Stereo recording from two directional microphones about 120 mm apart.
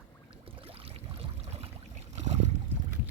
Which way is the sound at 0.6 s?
55° right (ahead or behind).